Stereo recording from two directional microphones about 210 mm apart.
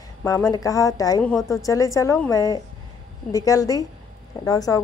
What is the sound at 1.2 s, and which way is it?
Speech, centre (ahead or behind).